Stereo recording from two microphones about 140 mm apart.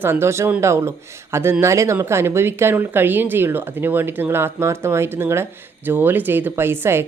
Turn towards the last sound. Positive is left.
turn(degrees=-15)  # may be behind; listen again after turning